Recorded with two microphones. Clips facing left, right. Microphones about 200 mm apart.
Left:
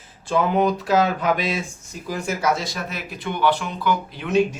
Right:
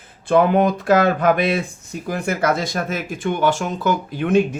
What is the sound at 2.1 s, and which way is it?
Speech, 60° right (ahead or behind).